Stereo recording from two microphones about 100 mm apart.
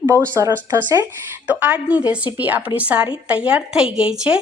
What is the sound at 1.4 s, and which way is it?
A woman's voice, 15° right (ahead or behind).